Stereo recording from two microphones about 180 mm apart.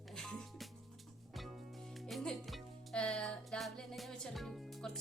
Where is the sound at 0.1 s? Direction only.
Centre (ahead or behind).